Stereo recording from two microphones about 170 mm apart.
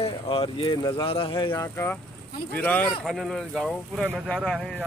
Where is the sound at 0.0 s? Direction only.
30° left (ahead or behind).